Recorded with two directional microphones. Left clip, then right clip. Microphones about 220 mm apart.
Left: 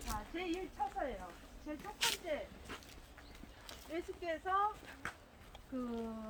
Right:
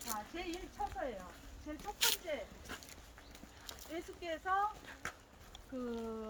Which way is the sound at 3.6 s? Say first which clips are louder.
Left 2 dB; 40° right (ahead or behind).